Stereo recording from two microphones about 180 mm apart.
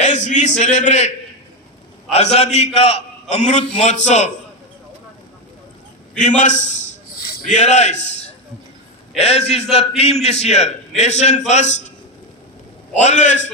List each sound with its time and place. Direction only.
0.0 s a man's voice: 40° left (ahead or behind)
6.1 s a man's voice: 45° left (ahead or behind)
7.2 s a sound: 55° left (ahead or behind)
7.5 s a man's voice: 40° left (ahead or behind)
9.1 s a man's voice: 35° left (ahead or behind)
13.0 s a man's voice: 40° left (ahead or behind)